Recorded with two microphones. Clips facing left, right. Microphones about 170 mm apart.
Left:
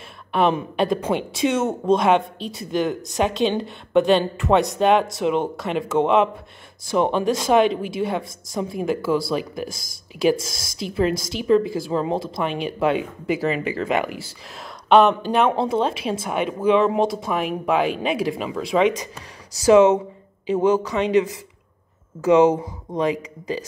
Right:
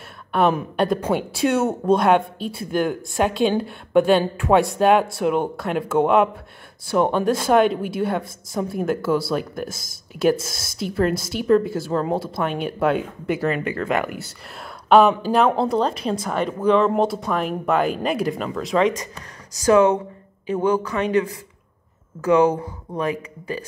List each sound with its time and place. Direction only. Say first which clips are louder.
0.3 s speech: right 1 dB; centre (ahead or behind)
19.6 s speech: left 2 dB; 20° left (ahead or behind)
22.2 s speech: left 2 dB; 10° left (ahead or behind)